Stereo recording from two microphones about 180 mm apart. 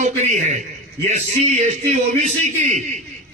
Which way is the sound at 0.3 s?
40° right (ahead or behind).